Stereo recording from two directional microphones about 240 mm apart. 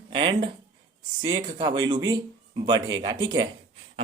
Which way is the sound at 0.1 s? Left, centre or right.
Centre.